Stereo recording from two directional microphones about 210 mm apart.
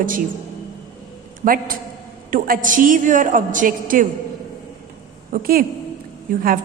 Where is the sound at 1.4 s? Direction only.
40° right (ahead or behind).